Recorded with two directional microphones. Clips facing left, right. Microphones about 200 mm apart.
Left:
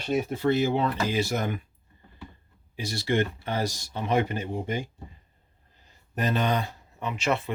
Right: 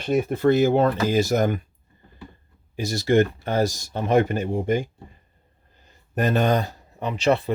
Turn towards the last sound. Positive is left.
turn(degrees=-35)  # may be behind; listen again after turning